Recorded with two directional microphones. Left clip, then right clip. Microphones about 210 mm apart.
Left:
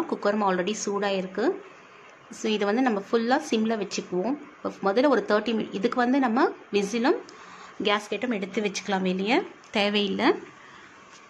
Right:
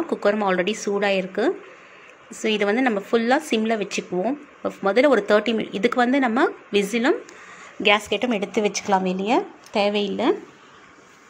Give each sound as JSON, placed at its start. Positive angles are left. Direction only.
{"t": 0.1, "sound": "speech", "side_deg": -5}